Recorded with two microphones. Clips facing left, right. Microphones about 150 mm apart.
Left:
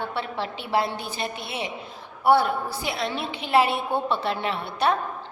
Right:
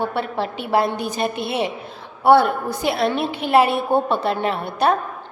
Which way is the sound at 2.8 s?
55° right (ahead or behind).